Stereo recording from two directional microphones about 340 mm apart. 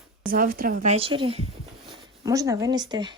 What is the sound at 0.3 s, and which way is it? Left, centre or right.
A woman's voice, right.